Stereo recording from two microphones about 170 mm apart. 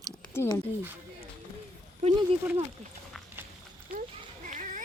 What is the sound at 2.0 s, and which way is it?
Speech, 45° right (ahead or behind).